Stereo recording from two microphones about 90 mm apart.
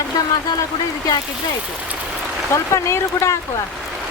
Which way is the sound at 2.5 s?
35° left (ahead or behind).